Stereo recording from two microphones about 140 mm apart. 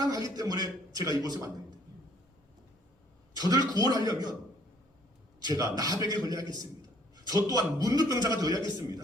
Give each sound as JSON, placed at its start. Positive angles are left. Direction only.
{"t": 0.0, "sound": "a man's voice", "side_deg": -25}
{"t": 3.3, "sound": "a man's voice", "side_deg": -25}
{"t": 5.5, "sound": "a man's voice", "side_deg": -25}